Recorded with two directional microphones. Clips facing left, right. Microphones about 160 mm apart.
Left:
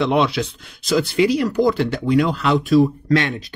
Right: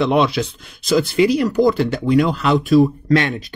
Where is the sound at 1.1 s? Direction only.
45° right (ahead or behind).